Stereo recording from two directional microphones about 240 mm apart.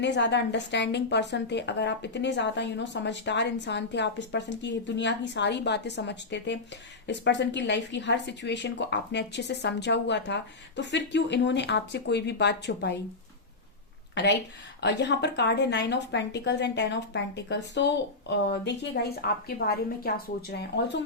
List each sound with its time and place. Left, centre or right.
0.0 s a woman's voice: left
14.2 s a woman's voice: left